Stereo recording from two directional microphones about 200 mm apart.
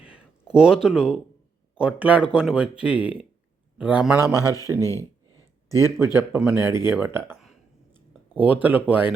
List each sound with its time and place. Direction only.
0.0 s a sound: 5° right (ahead or behind)
1.8 s a man's voice: 5° right (ahead or behind)
4.8 s speech: 15° left (ahead or behind)
6.1 s a man's voice: 5° right (ahead or behind)
7.9 s a sound: 10° right (ahead or behind)
8.6 s a man's voice: 10° right (ahead or behind)